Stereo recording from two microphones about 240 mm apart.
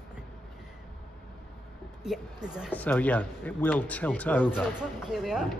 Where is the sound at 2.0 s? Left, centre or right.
Centre.